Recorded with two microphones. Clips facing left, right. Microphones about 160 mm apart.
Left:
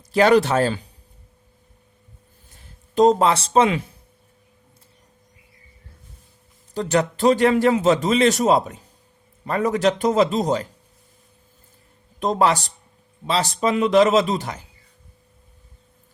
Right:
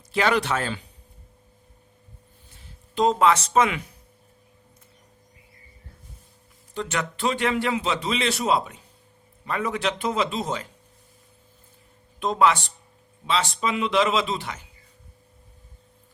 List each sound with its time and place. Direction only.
0.1 s a man's voice: 40° left (ahead or behind)
2.9 s a man's voice: 40° left (ahead or behind)
6.7 s a man's voice: 35° left (ahead or behind)
12.2 s a man's voice: 40° left (ahead or behind)